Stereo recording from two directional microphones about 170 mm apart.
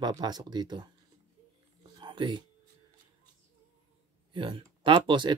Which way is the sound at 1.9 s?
25° right (ahead or behind).